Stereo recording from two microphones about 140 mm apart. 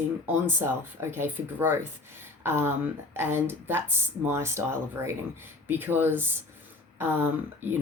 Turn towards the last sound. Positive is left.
turn(degrees=-15)  # may be behind; listen again after turning